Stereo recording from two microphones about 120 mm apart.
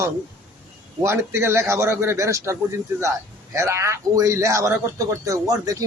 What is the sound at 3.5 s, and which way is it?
Speech, 25° right (ahead or behind).